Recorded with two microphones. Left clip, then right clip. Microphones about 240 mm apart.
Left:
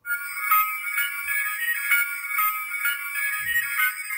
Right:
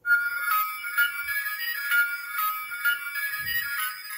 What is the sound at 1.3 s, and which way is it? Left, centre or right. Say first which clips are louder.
Music: left 4 dB; centre.